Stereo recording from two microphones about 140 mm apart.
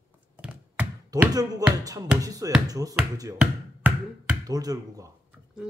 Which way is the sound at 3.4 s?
10° right (ahead or behind).